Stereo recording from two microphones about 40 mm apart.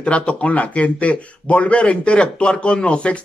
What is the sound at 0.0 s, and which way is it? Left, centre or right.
Speech, left.